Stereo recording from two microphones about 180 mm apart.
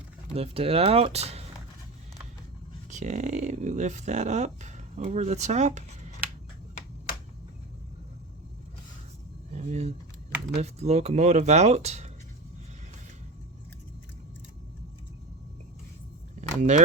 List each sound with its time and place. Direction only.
0.3 s speech: 35° right (ahead or behind)
2.9 s speech: 40° right (ahead or behind)
9.5 s keys jangling: 40° right (ahead or behind)
10.6 s speech: 35° right (ahead or behind)
16.4 s a sound: 40° right (ahead or behind)